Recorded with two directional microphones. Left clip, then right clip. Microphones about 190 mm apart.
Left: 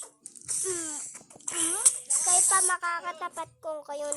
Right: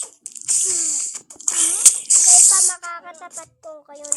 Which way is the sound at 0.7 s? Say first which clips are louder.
Right 11 dB; 45° right (ahead or behind).